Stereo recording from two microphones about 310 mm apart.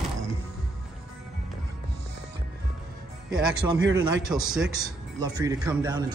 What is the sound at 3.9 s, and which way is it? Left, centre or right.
Speech, centre.